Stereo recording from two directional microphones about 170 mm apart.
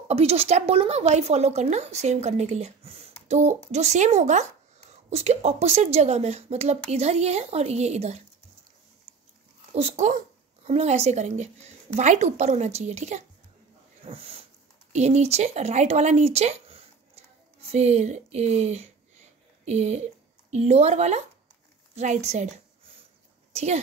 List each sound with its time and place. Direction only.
0.1 s a woman's voice: 35° right (ahead or behind)
9.8 s a woman's voice: 40° right (ahead or behind)
23.5 s speech: 40° right (ahead or behind)